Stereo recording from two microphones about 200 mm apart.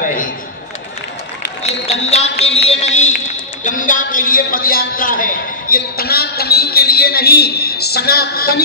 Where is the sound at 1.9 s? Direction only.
30° left (ahead or behind).